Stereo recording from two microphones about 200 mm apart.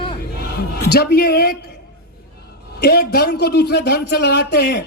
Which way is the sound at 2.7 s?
50° left (ahead or behind).